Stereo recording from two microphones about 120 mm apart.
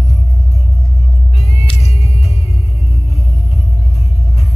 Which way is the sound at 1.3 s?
60° left (ahead or behind).